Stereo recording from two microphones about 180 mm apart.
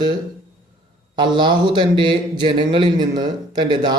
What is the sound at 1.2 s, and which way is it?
A man's voice, 25° right (ahead or behind).